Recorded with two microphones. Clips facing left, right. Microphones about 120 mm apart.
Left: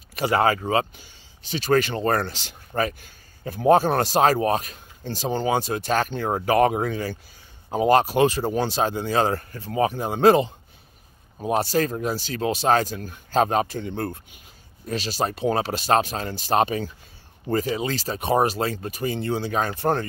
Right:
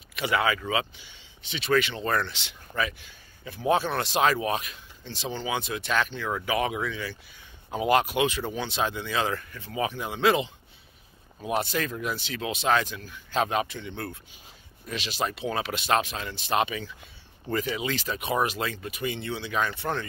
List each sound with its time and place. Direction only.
0.1 s speech: 40° left (ahead or behind)